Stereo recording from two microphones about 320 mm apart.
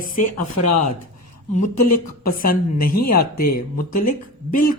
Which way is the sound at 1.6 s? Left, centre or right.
Left.